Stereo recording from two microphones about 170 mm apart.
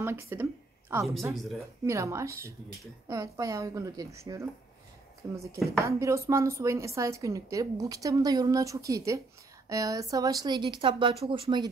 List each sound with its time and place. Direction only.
0.0 s a woman's voice: 15° right (ahead or behind)